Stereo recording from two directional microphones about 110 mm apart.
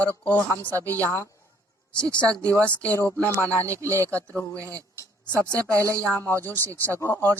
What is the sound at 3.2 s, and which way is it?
Speech, 30° right (ahead or behind).